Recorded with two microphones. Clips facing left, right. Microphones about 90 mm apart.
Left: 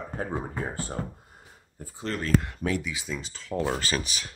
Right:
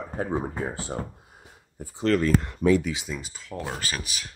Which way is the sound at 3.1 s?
5° right (ahead or behind).